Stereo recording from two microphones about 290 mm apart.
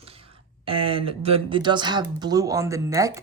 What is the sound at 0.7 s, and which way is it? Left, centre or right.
Speech, centre.